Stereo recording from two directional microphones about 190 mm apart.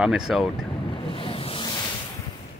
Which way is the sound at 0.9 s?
30° left (ahead or behind).